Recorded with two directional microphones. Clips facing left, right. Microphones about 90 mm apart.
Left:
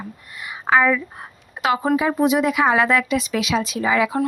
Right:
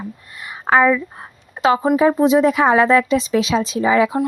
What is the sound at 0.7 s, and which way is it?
Speech, 40° right (ahead or behind).